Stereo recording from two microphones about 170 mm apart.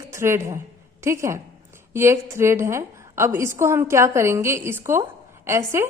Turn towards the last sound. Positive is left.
turn(degrees=-15)  # may be behind; listen again after turning